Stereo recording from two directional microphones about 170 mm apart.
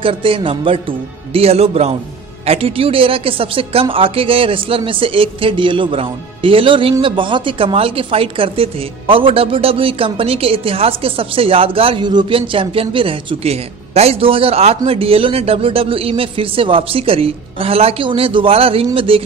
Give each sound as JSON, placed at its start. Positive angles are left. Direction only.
{"t": 0.0, "sound": "speech", "side_deg": -30}